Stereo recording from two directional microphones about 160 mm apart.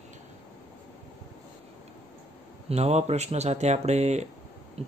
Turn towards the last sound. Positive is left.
turn(degrees=-40)  # may be behind; listen again after turning